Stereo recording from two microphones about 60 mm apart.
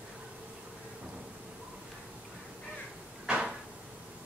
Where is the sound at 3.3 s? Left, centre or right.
Right.